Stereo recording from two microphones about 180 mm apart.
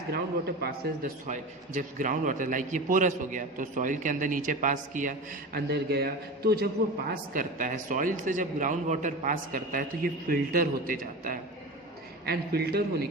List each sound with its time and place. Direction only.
0.1 s a man's voice: 60° right (ahead or behind)
1.3 s a man's voice: 45° right (ahead or behind)
5.5 s a man's voice: 65° right (ahead or behind)
7.1 s a man's voice: 50° right (ahead or behind)